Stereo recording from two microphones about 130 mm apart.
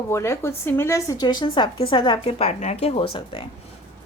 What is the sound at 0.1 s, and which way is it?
A woman's voice, 20° left (ahead or behind).